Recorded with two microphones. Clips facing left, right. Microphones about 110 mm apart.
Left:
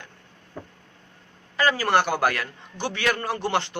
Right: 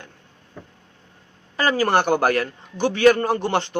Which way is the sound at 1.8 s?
45° right (ahead or behind).